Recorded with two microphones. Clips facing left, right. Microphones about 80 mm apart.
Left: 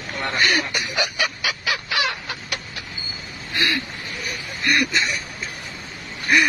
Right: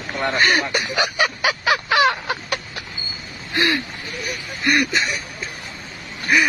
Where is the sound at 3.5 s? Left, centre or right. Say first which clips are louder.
Right 4 dB; right.